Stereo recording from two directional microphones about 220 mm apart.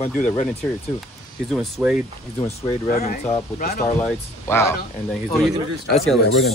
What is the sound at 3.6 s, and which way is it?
Speech, 40° left (ahead or behind).